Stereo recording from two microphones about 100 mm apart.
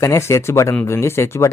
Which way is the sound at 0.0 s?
30° left (ahead or behind).